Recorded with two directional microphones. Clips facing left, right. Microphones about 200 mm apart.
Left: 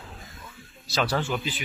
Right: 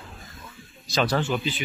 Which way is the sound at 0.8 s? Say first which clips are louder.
Right 2 dB; 5° left (ahead or behind).